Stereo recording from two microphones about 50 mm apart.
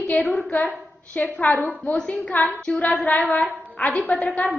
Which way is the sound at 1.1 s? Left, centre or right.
Left.